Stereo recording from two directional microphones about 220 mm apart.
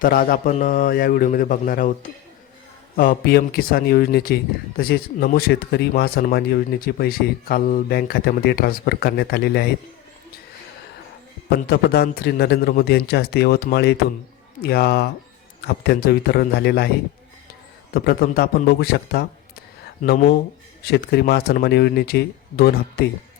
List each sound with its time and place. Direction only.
0.0 s a man's voice: 40° left (ahead or behind)
11.5 s speech: 45° left (ahead or behind)
17.9 s speech: 45° left (ahead or behind)
20.0 s a man's voice: 35° left (ahead or behind)
20.8 s speech: 50° left (ahead or behind)